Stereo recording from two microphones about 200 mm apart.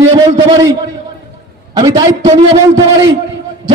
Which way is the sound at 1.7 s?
20° right (ahead or behind).